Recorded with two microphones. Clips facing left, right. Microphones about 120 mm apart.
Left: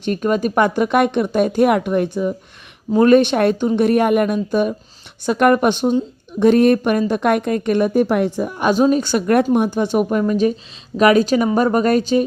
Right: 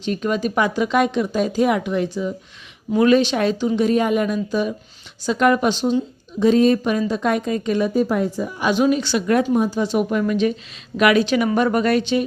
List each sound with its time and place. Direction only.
0.0 s speech: 50° left (ahead or behind)
6.4 s a woman's voice: 60° left (ahead or behind); by 12.2 s 40° left (ahead or behind)